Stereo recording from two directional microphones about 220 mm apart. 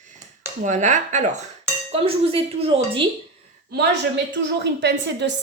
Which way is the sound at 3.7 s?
50° right (ahead or behind).